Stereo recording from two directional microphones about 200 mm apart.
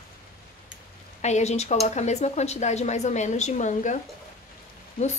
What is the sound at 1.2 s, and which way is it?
A woman's voice, 35° left (ahead or behind).